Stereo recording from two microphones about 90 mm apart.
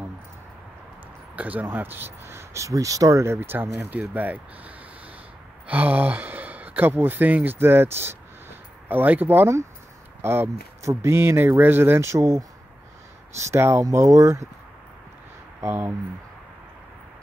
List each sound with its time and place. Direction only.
1.3 s speech: 20° right (ahead or behind); by 3.3 s 35° right (ahead or behind)
3.3 s speech: 25° right (ahead or behind)
15.6 s speech: 25° right (ahead or behind)